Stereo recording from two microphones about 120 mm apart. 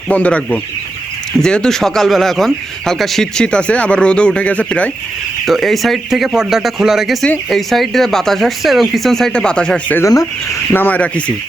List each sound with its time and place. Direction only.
0.1 s speech: 10° left (ahead or behind)
5.5 s speech: centre (ahead or behind)
10.0 s speech: 30° left (ahead or behind)
10.8 s speech: 15° left (ahead or behind)